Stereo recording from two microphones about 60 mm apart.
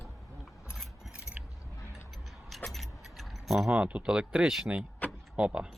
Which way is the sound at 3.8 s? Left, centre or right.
Centre.